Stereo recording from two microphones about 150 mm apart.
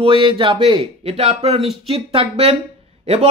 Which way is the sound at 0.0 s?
35° right (ahead or behind).